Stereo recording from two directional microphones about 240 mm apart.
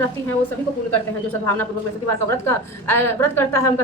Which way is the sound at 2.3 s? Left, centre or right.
Centre.